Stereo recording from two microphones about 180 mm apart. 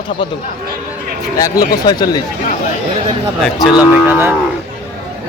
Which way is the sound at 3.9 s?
10° right (ahead or behind).